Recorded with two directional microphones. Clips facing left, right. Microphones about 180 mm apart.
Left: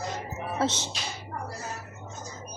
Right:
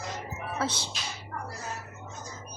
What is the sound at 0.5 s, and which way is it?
Speech, 25° left (ahead or behind).